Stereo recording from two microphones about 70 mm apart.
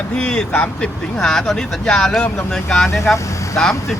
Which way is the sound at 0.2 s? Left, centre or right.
Centre.